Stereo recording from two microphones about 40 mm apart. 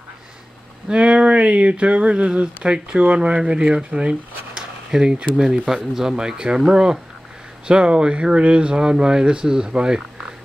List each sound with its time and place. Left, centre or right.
0.8 s speech: right
4.6 s speech: centre